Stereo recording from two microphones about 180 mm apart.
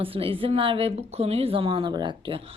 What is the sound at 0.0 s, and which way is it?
A woman's voice, 30° right (ahead or behind).